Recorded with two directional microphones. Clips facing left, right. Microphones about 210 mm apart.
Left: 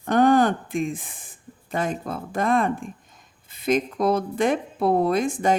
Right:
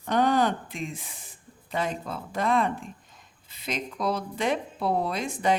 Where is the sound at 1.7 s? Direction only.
50° left (ahead or behind).